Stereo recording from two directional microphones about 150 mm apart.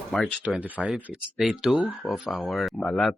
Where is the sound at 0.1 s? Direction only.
5° left (ahead or behind).